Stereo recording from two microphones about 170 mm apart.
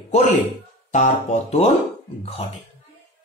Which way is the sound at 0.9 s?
45° left (ahead or behind).